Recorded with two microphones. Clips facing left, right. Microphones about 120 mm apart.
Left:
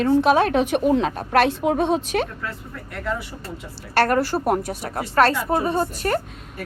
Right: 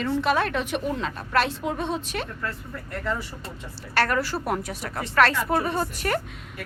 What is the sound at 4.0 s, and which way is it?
A woman's voice, 45° left (ahead or behind).